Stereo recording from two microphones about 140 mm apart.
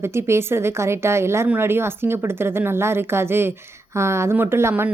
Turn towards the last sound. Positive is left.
turn(degrees=-15)  # may be behind; listen again after turning